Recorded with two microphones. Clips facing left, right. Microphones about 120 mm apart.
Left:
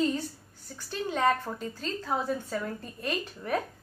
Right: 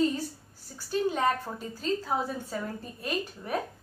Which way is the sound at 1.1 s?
10° right (ahead or behind).